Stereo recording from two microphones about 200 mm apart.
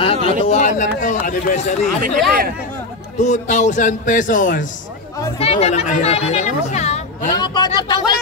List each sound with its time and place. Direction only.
0.0 s speech: 30° left (ahead or behind)
3.2 s speech: 35° left (ahead or behind)
7.2 s a man's voice: 20° left (ahead or behind)